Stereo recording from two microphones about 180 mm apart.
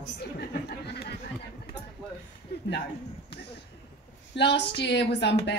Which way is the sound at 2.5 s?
65° left (ahead or behind).